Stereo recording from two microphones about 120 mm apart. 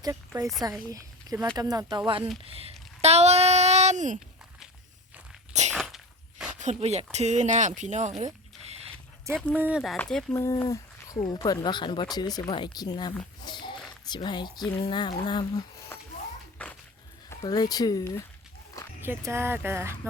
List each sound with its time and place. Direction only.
0.0 s speech: 30° right (ahead or behind); by 4.2 s 90° right
5.7 s a sound: centre (ahead or behind)
6.6 s speech: 75° right (ahead or behind)
8.2 s a sound: 60° right (ahead or behind)
9.6 s speech: 15° right (ahead or behind)
10.0 s speech: 5° left (ahead or behind)
10.3 s speech: 25° left (ahead or behind); by 15.6 s 40° left (ahead or behind)
15.9 s music: 20° left (ahead or behind)
16.6 s dog: 10° left (ahead or behind)
17.5 s speech: 35° left (ahead or behind)
19.0 s speech: 20° right (ahead or behind)